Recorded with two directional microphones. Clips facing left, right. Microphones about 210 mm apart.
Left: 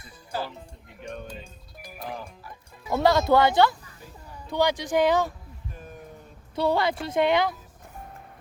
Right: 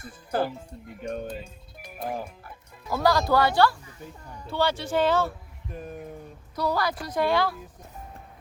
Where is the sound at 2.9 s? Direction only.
25° left (ahead or behind).